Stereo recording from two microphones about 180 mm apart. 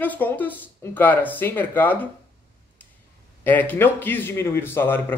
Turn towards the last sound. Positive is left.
turn(degrees=10)  # may be behind; listen again after turning